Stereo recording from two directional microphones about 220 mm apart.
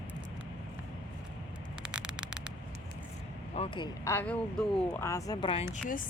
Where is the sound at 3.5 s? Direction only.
25° left (ahead or behind).